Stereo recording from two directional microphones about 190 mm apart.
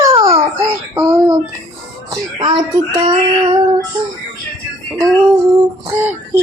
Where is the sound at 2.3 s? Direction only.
25° right (ahead or behind).